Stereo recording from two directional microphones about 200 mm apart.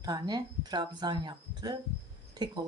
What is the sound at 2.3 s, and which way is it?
Cricket, 20° right (ahead or behind).